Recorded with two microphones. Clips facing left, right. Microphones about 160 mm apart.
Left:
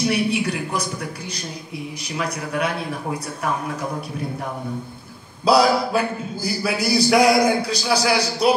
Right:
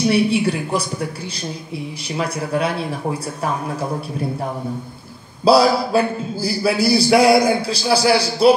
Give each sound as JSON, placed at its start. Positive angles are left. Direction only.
{"t": 0.3, "sound": "a man's voice", "side_deg": -30}
{"t": 2.1, "sound": "a man's voice", "side_deg": -30}
{"t": 5.4, "sound": "a man's voice", "side_deg": -30}